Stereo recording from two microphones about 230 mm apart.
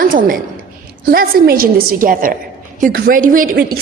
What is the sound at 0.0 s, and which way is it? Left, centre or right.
A woman's voice, right.